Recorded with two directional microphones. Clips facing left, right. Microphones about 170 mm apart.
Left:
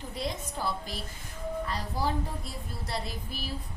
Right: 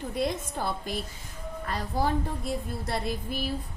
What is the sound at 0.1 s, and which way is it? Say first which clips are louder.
A woman's voice: right 5 dB; 55° right (ahead or behind).